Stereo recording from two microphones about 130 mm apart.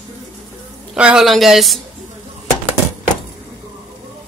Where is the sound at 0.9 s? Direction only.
5° right (ahead or behind).